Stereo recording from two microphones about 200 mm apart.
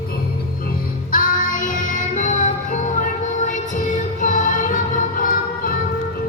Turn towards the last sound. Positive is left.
turn(degrees=45)  # may be behind; listen again after turning